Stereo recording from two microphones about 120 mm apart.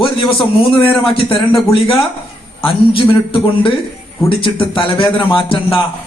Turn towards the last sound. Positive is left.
turn(degrees=45)  # may be behind; listen again after turning